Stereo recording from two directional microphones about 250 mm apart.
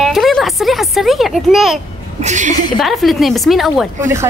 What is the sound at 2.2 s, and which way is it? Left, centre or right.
Speech, right.